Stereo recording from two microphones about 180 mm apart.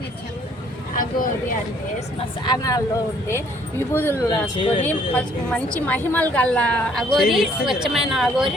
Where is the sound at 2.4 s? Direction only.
20° left (ahead or behind).